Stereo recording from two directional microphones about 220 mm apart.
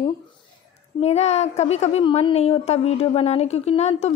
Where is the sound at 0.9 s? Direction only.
30° left (ahead or behind).